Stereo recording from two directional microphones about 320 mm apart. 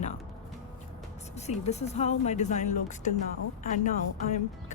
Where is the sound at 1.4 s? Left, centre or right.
Left.